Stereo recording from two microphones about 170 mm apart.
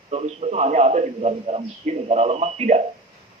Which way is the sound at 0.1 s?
40° right (ahead or behind).